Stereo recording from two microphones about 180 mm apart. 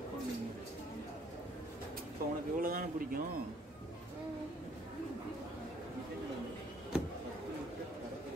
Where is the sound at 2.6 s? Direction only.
50° right (ahead or behind).